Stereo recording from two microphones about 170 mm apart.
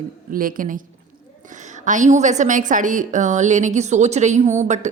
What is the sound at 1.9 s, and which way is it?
A woman's voice, 45° right (ahead or behind).